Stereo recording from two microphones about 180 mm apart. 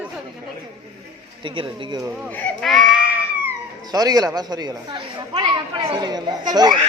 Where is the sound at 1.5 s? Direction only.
30° right (ahead or behind).